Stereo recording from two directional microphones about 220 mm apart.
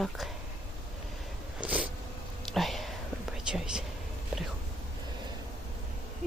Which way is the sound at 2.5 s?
Centre (ahead or behind).